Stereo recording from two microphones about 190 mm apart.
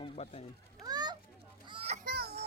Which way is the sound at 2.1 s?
55° right (ahead or behind).